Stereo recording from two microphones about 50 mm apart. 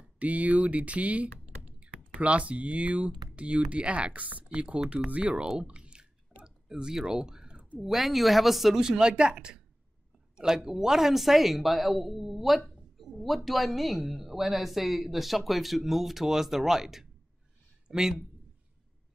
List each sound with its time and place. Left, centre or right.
0.2 s speech: right
5.6 s clicking: centre
6.4 s a sound: centre
7.8 s speech: centre